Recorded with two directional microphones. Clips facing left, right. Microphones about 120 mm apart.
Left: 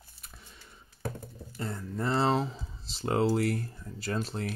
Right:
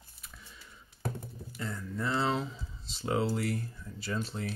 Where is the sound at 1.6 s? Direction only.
35° left (ahead or behind).